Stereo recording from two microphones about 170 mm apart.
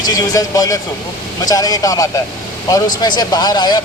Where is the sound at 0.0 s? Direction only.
25° left (ahead or behind).